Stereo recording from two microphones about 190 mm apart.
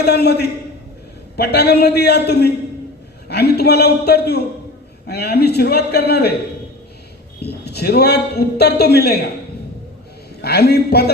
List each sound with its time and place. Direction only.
0.0 s a man's voice: 60° left (ahead or behind)
7.4 s a man's voice: 60° left (ahead or behind)
10.4 s a man's voice: 55° left (ahead or behind)